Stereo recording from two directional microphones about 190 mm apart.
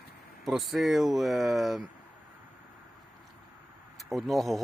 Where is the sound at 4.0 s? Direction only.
Centre (ahead or behind).